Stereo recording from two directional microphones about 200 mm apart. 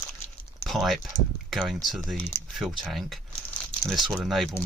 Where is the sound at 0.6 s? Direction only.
Centre (ahead or behind).